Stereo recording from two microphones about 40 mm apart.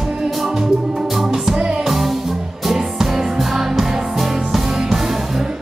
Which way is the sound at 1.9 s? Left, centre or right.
Centre.